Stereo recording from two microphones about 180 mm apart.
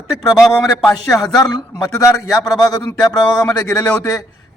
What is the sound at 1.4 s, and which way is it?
A man's voice, 20° left (ahead or behind).